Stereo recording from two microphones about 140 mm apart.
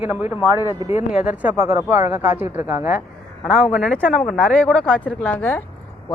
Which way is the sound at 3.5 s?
Centre (ahead or behind).